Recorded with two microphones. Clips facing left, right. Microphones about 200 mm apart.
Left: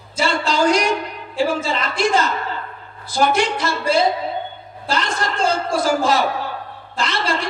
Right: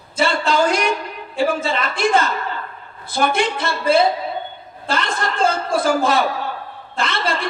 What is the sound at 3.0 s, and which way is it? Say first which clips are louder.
Speech: left 1 dB; 55° right (ahead or behind).